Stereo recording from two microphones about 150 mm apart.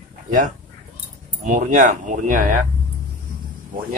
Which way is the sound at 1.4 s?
60° right (ahead or behind).